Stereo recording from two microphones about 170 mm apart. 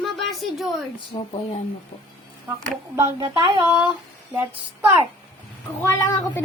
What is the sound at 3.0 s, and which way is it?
Speech, 25° right (ahead or behind).